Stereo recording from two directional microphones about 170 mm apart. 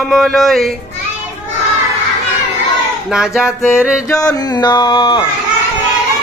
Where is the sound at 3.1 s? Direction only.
5° right (ahead or behind).